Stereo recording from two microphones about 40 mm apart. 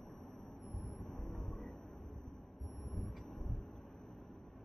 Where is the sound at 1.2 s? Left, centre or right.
Left.